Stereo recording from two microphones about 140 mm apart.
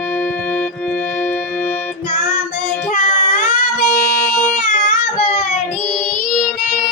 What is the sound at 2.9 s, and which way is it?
Child singing, 60° left (ahead or behind).